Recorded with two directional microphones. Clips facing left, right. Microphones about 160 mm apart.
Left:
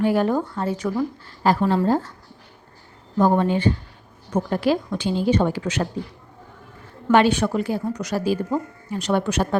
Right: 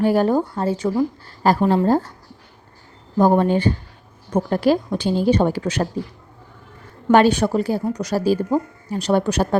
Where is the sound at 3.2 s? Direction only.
40° right (ahead or behind).